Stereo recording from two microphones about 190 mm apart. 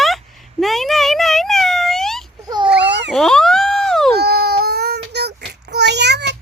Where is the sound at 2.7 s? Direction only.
65° right (ahead or behind).